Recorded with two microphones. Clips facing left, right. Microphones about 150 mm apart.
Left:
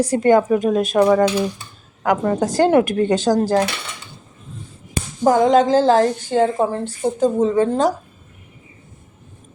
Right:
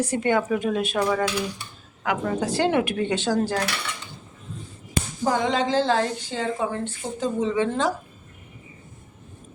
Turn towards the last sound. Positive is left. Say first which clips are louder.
# left 7 dB
turn(degrees=40)  # may be behind; listen again after turning